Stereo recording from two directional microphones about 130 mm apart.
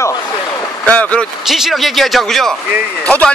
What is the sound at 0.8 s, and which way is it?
Speech, 10° left (ahead or behind).